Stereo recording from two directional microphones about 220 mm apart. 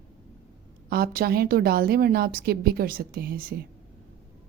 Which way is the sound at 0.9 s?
40° right (ahead or behind).